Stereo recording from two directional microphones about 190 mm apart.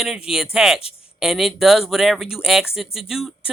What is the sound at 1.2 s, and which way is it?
Speech, centre (ahead or behind).